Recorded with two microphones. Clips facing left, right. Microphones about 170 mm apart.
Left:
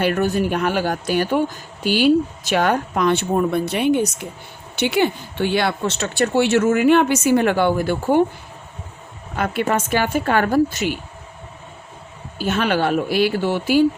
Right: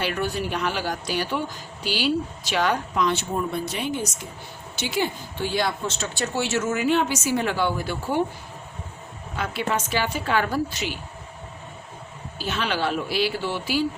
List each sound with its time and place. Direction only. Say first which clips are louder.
0.0 s speech: left 8 dB; 50° left (ahead or behind)
9.3 s speech: left 6 dB; 55° left (ahead or behind)
12.4 s speech: left 7 dB; 50° left (ahead or behind)